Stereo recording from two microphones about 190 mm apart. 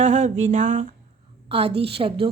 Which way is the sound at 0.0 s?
40° right (ahead or behind).